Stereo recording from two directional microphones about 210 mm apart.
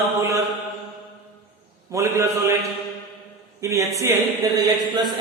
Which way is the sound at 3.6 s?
15° right (ahead or behind).